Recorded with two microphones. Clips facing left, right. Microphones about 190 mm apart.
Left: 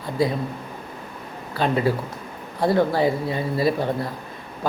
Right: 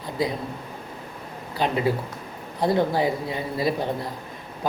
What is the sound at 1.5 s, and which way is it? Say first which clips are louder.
Speech: left 2 dB; 15° right (ahead or behind).